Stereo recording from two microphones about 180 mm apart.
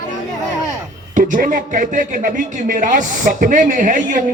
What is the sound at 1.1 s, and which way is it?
Speech, 45° right (ahead or behind).